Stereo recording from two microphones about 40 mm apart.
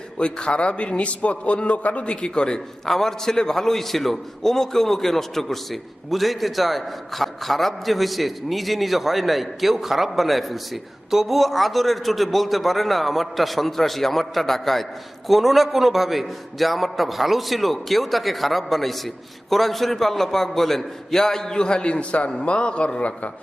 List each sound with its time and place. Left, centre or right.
0.2 s a man's voice: left
2.2 s a man's voice: left